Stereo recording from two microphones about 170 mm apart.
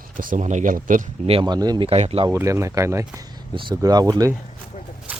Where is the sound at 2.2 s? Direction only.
15° right (ahead or behind).